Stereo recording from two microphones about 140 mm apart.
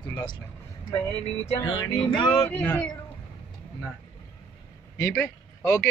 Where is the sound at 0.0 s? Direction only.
30° left (ahead or behind).